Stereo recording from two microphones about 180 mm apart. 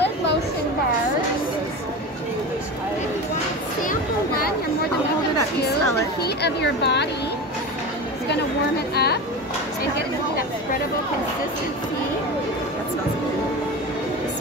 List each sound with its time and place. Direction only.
3.8 s a sound: 50° left (ahead or behind)
6.2 s speech: 65° left (ahead or behind)
8.9 s speech: 65° left (ahead or behind)